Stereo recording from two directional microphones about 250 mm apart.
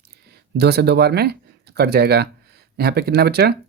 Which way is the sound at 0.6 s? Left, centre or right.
Right.